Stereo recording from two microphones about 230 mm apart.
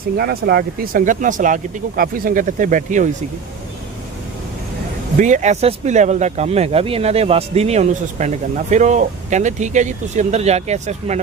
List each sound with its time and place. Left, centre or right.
0.2 s speech: right
5.1 s speech: right